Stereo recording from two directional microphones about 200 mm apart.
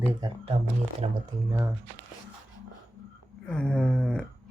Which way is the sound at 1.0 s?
30° right (ahead or behind).